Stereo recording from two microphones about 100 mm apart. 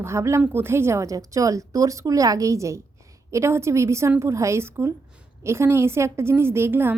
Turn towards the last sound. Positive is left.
turn(degrees=-20)  # may be behind; listen again after turning